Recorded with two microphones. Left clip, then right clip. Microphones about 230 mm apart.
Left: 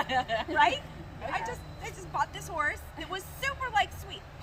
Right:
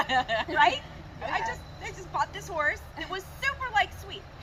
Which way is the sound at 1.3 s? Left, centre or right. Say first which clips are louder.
Right 4 dB; left.